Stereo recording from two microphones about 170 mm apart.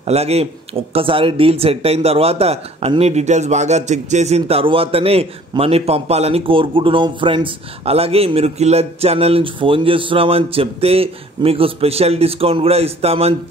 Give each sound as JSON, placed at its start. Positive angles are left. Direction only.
{"t": 0.0, "sound": "speech", "side_deg": -40}